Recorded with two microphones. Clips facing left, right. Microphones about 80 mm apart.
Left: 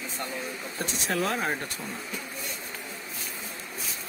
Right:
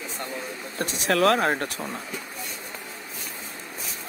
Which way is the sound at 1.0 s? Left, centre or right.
Right.